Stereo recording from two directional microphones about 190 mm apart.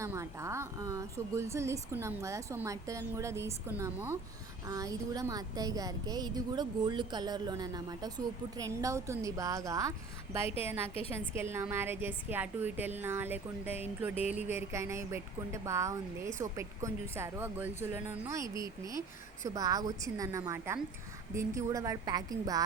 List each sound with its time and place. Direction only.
0.0 s a woman's voice: 15° right (ahead or behind)